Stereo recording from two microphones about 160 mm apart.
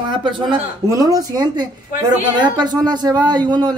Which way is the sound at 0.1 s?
30° right (ahead or behind).